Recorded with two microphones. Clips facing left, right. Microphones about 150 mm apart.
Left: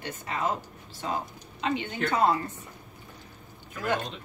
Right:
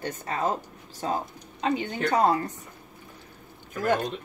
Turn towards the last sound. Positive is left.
turn(degrees=-45)  # may be behind; listen again after turning